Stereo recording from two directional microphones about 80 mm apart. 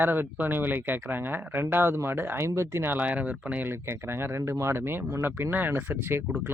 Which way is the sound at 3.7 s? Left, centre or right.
Right.